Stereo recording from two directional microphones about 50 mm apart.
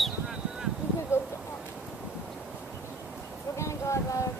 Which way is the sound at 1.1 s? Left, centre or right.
Left.